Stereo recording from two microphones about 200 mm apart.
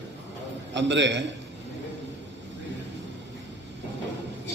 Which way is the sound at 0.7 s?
65° right (ahead or behind).